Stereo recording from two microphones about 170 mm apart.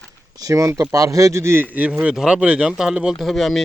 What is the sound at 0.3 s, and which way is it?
A man's voice, 20° right (ahead or behind).